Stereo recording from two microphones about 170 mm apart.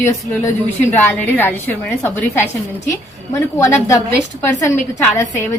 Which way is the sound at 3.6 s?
15° left (ahead or behind).